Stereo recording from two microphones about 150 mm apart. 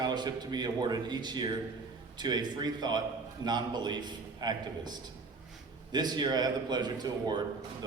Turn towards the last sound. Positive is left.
turn(degrees=-30)  # may be behind; listen again after turning